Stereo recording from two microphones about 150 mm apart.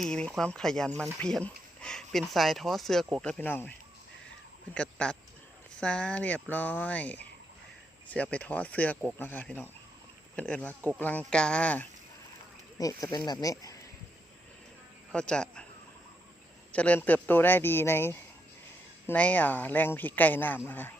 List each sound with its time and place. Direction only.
0.0 s speech: 5° left (ahead or behind)
12.8 s speech: 25° left (ahead or behind)
15.1 s a man's voice: 5° left (ahead or behind)
16.7 s speech: 10° left (ahead or behind)